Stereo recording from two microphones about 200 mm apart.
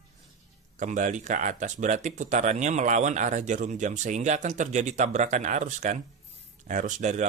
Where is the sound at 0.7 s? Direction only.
35° right (ahead or behind).